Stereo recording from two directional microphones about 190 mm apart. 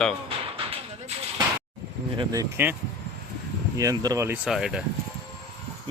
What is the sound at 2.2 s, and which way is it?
Speech, 20° right (ahead or behind).